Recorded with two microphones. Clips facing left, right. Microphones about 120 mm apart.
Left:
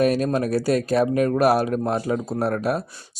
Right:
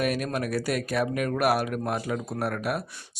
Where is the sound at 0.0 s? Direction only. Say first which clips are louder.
Left 7 dB; 35° left (ahead or behind).